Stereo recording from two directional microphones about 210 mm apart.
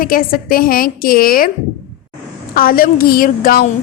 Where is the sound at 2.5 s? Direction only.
45° left (ahead or behind).